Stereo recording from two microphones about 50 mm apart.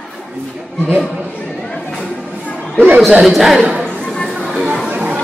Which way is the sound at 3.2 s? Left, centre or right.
Centre.